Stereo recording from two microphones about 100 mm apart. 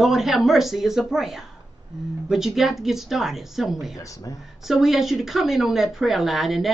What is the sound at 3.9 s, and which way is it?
Speech, 35° left (ahead or behind).